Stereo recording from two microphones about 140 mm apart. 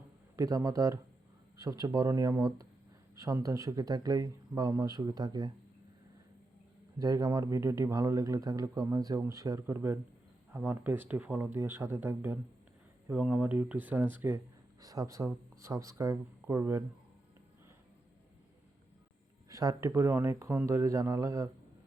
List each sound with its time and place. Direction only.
0.3 s speech: 25° right (ahead or behind)
7.0 s speech: 25° right (ahead or behind)
19.5 s speech: 25° right (ahead or behind)